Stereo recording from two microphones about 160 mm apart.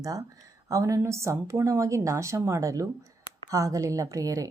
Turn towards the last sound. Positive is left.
turn(degrees=-20)  # may be behind; listen again after turning